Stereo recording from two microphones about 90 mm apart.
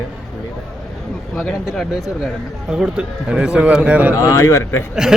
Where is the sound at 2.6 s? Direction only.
10° right (ahead or behind).